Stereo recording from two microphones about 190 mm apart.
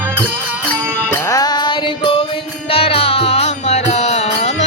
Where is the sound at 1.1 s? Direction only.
15° left (ahead or behind).